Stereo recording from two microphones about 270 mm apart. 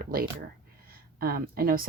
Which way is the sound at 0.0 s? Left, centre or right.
Right.